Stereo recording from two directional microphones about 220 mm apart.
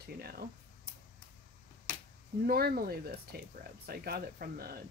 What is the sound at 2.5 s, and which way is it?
Speech, 45° right (ahead or behind).